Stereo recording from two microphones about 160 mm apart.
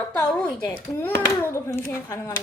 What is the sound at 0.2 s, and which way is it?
A child's voice, 10° left (ahead or behind).